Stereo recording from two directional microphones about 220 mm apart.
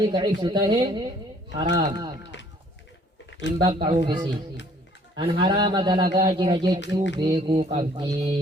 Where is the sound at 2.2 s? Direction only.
55° left (ahead or behind).